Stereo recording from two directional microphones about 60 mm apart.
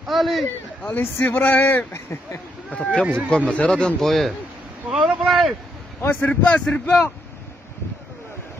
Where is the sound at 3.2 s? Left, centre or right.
Centre.